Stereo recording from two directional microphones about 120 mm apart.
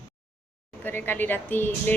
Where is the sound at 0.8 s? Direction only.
15° left (ahead or behind).